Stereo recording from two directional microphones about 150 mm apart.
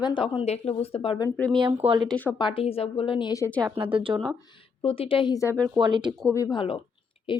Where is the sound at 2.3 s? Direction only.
35° left (ahead or behind).